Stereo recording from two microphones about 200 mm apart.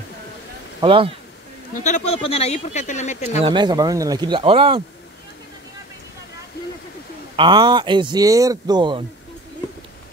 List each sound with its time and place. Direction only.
0.7 s speech: 25° right (ahead or behind)
1.8 s speech: 35° left (ahead or behind)
3.4 s speech: 20° right (ahead or behind)
7.3 s speech: 20° right (ahead or behind)